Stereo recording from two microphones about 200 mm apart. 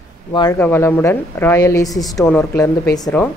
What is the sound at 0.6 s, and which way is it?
A woman's voice, 10° left (ahead or behind).